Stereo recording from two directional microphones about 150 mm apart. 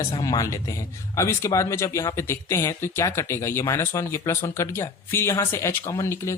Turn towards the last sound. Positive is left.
turn(degrees=20)  # may be behind; listen again after turning